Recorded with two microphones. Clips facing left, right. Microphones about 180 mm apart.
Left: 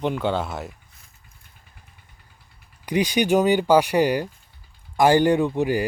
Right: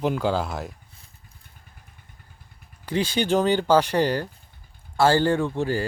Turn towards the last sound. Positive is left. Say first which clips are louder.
# left 3 dB
turn(degrees=15)  # may be behind; listen again after turning